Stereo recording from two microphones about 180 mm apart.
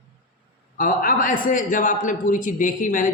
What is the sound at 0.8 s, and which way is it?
A man's voice, 50° left (ahead or behind).